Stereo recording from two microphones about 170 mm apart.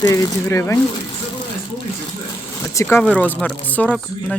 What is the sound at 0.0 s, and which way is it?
Speech, 20° left (ahead or behind).